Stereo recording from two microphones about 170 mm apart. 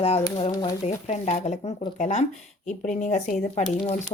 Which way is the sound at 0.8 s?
40° left (ahead or behind).